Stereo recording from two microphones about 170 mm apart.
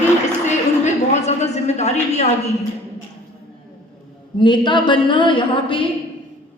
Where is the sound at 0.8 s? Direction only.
40° left (ahead or behind).